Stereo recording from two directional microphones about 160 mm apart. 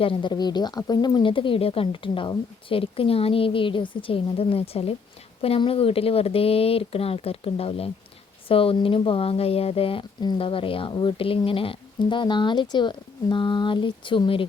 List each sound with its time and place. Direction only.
0.0 s speech: 30° left (ahead or behind)